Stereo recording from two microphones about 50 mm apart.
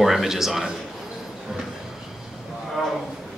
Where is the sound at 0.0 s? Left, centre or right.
Centre.